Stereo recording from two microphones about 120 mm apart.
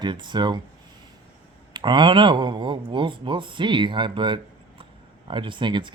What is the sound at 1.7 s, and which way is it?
Speech, 40° right (ahead or behind).